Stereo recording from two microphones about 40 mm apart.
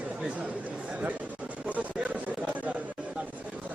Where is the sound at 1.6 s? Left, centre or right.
Right.